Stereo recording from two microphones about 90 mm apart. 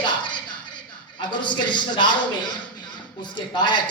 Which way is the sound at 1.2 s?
60° left (ahead or behind).